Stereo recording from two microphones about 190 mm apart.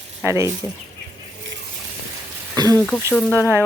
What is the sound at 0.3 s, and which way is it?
Speech, 15° right (ahead or behind).